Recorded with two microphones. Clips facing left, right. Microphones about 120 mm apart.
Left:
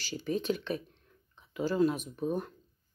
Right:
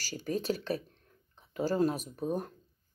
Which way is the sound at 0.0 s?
40° right (ahead or behind).